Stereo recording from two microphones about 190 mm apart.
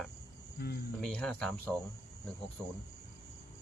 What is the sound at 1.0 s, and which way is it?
Speech, 5° left (ahead or behind).